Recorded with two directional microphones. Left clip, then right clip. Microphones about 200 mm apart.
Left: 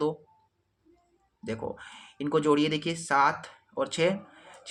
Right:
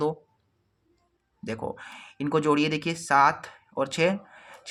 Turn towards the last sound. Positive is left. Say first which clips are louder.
# right 2 dB
turn(degrees=-30)  # may be behind; listen again after turning